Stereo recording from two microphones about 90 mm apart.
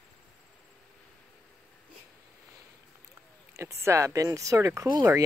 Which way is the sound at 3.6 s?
30° right (ahead or behind).